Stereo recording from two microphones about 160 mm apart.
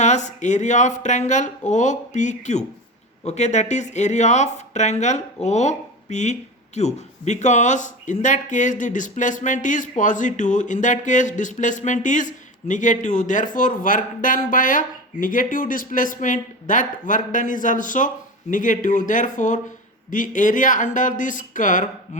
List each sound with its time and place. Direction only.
0.0 s speech: 50° left (ahead or behind)